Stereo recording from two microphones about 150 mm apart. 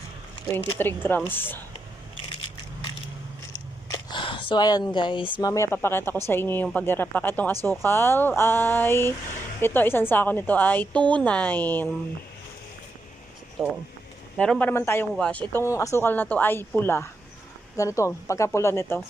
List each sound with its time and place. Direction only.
0.4 s a woman's voice: 15° left (ahead or behind)
3.8 s a woman's voice: 30° left (ahead or behind); by 11.9 s 10° left (ahead or behind)
13.6 s speech: 10° right (ahead or behind)
14.3 s a woman's voice: 5° left (ahead or behind)